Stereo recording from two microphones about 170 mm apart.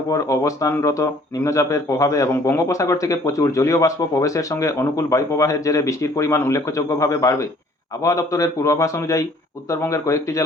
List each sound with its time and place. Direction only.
0.1 s a man's voice: 20° left (ahead or behind)